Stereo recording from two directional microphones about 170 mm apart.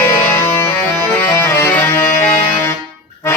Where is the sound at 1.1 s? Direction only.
15° left (ahead or behind).